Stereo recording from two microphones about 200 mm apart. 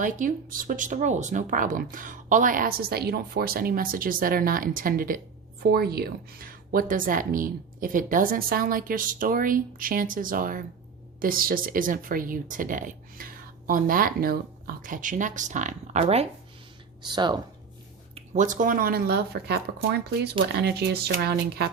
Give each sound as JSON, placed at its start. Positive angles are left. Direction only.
{"t": 0.0, "sound": "speech", "side_deg": -40}
{"t": 17.1, "sound": "speech", "side_deg": -20}
{"t": 18.1, "sound": "speech", "side_deg": -40}